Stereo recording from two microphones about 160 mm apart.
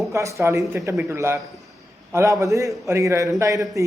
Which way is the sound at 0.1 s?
20° right (ahead or behind).